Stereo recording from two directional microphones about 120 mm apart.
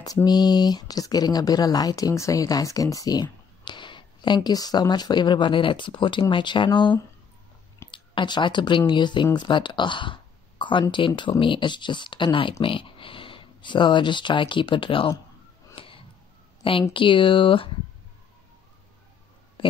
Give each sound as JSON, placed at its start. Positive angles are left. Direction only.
{"t": 0.0, "sound": "speech", "side_deg": 35}
{"t": 15.7, "sound": "a sound", "side_deg": 45}
{"t": 16.9, "sound": "speech", "side_deg": 45}